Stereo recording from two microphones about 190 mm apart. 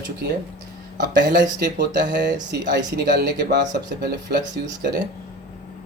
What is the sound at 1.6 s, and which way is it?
Speech, 60° right (ahead or behind).